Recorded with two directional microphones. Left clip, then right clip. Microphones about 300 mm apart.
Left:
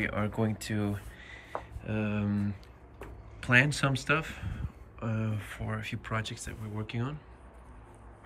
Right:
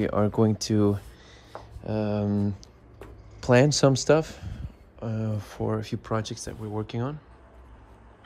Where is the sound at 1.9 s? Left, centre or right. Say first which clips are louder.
Right 8 dB; centre.